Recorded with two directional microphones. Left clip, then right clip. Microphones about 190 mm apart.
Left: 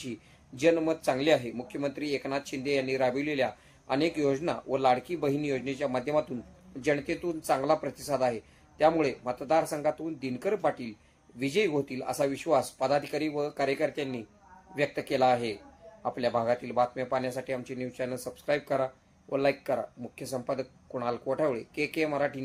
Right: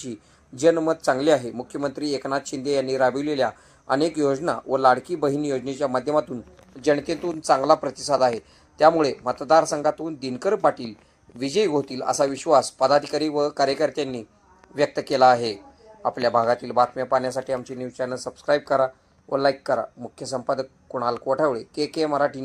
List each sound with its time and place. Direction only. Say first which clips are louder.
0.6 s speech: right 6 dB; 5° right (ahead or behind)
16.9 s speech: right 8 dB; 20° left (ahead or behind)
18.0 s speech: right 8 dB; centre (ahead or behind)
19.6 s speech: right 7 dB; 5° right (ahead or behind)